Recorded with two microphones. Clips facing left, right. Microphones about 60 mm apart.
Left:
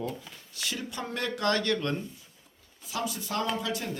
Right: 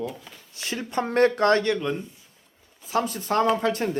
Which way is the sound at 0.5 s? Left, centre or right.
Right.